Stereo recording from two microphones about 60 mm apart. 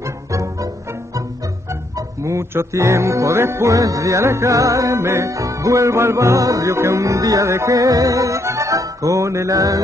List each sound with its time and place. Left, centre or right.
0.0 s music: right
2.0 s music: right
3.7 s music: right